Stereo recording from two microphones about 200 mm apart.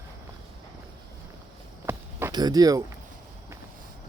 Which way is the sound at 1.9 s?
10° right (ahead or behind).